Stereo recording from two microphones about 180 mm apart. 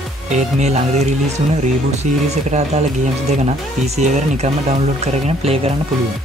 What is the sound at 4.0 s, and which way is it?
Speech, 40° right (ahead or behind).